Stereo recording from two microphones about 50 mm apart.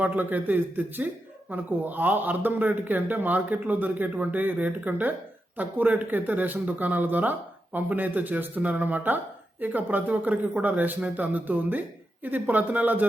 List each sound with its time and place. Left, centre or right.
0.0 s speech: right